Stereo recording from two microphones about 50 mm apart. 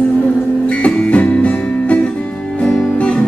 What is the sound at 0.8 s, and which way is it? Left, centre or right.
Music, left.